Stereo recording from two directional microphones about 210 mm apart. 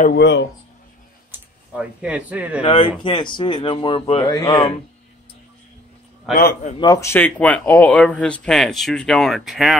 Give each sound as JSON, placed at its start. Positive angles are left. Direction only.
{"t": 0.0, "sound": "speech", "side_deg": 55}
{"t": 1.3, "sound": "speech", "side_deg": -5}
{"t": 2.6, "sound": "speech", "side_deg": 25}
{"t": 6.3, "sound": "a man's voice", "side_deg": 45}
{"t": 6.8, "sound": "speech", "side_deg": 15}